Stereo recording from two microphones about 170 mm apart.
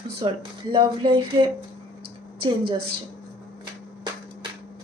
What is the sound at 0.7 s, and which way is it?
Speech, 25° right (ahead or behind).